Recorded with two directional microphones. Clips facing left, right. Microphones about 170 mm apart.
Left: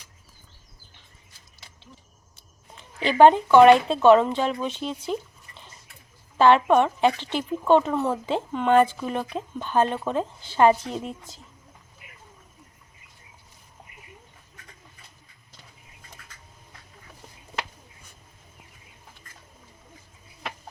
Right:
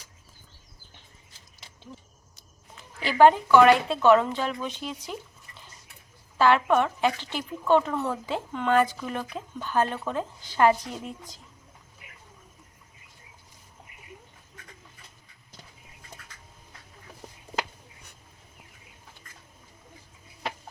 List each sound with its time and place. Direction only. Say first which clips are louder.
2.7 s speech: left 3 dB; 25° left (ahead or behind)
6.3 s speech: left 4 dB; 25° left (ahead or behind)